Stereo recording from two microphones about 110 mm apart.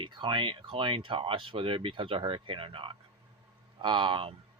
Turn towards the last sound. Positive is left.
turn(degrees=-50)  # may be behind; listen again after turning